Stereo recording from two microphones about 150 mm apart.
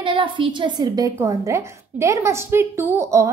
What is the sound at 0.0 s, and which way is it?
A woman's voice, 35° right (ahead or behind).